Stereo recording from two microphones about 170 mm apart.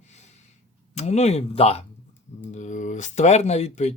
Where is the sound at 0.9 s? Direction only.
40° left (ahead or behind).